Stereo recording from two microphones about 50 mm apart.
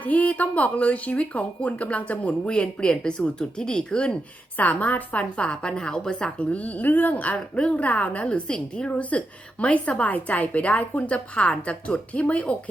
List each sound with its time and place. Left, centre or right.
0.0 s speech: left
4.5 s speech: left
6.5 s speech: left
8.4 s a woman's voice: centre
8.9 s speech: left